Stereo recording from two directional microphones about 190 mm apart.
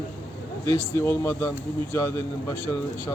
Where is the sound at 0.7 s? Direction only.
15° left (ahead or behind).